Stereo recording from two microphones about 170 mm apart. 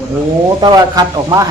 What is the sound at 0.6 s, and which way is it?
Speech, 25° right (ahead or behind).